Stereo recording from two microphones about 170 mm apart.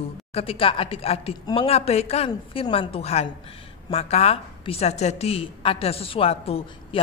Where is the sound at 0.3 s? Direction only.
35° left (ahead or behind).